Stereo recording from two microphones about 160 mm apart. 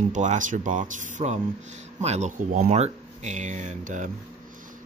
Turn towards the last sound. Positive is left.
turn(degrees=-55)  # may be behind; listen again after turning